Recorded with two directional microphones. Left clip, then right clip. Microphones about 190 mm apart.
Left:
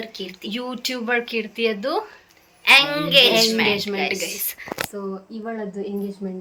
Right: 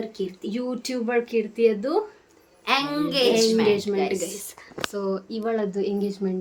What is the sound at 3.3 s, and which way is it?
Speech, 5° right (ahead or behind).